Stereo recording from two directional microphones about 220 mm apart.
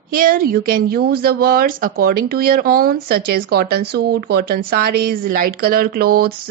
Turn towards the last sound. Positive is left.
turn(degrees=-45)  # may be behind; listen again after turning